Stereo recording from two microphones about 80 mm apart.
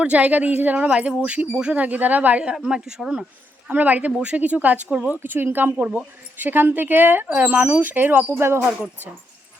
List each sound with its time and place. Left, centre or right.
0.0 s speech: centre
3.7 s a woman's voice: centre
6.3 s a woman's voice: right